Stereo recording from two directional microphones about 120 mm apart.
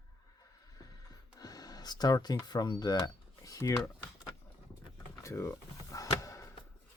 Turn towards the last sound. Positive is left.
turn(degrees=25)  # may be behind; listen again after turning